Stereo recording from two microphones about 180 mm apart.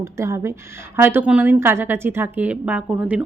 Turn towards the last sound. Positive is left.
turn(degrees=-5)  # may be behind; listen again after turning